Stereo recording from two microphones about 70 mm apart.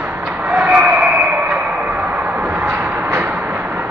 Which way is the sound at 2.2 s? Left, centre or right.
Right.